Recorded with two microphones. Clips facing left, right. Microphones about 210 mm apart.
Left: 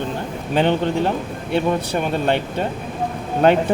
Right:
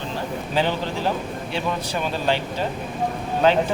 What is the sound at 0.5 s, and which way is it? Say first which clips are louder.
Speech: left 7 dB; 60° left (ahead or behind).